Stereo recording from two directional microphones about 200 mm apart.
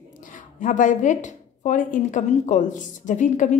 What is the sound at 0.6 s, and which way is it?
A woman's voice, 40° left (ahead or behind).